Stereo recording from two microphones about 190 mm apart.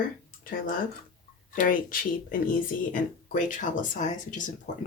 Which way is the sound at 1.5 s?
45° left (ahead or behind).